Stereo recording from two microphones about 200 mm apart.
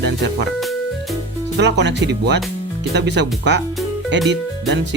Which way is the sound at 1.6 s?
60° right (ahead or behind).